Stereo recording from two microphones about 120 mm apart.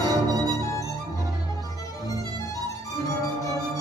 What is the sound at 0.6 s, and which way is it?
Music, 25° left (ahead or behind).